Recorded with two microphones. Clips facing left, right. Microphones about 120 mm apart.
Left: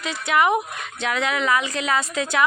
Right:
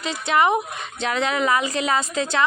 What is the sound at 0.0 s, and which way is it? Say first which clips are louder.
A woman's voice: right 1 dB; 5° left (ahead or behind).